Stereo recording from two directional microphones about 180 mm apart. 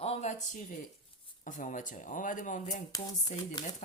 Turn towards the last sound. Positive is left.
turn(degrees=20)  # may be behind; listen again after turning